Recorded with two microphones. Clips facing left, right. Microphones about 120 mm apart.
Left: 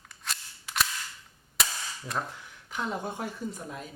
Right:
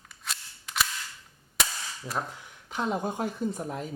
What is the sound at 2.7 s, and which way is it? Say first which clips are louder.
Speech: right 4 dB; 20° right (ahead or behind).